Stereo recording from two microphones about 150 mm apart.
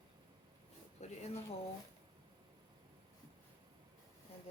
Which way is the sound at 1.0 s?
45° left (ahead or behind).